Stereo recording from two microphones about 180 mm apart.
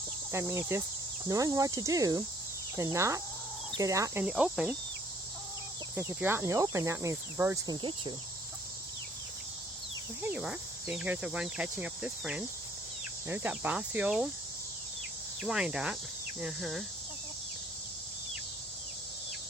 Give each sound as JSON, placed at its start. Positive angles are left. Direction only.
{"t": 0.3, "sound": "speech", "side_deg": -15}
{"t": 1.3, "sound": "cricket", "side_deg": -20}
{"t": 2.7, "sound": "speech", "side_deg": -15}
{"t": 6.0, "sound": "speech", "side_deg": -10}
{"t": 10.2, "sound": "speech", "side_deg": -10}
{"t": 15.4, "sound": "speech", "side_deg": -5}